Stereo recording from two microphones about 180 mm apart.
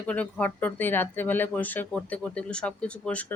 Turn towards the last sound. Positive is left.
turn(degrees=5)  # may be behind; listen again after turning